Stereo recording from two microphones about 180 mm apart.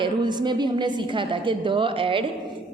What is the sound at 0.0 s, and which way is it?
A woman's voice, 25° right (ahead or behind).